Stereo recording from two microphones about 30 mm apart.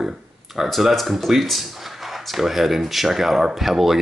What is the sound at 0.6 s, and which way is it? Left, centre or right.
Speech, centre.